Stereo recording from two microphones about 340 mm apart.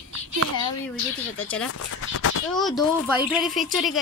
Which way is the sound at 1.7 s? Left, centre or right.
Left.